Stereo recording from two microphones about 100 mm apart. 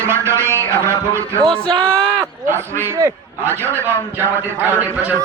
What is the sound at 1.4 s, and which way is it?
Speech, 5° left (ahead or behind).